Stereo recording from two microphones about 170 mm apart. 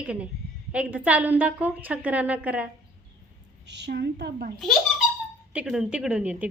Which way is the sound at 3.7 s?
85° right.